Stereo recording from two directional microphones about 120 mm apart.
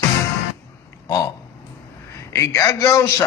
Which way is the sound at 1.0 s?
30° left (ahead or behind).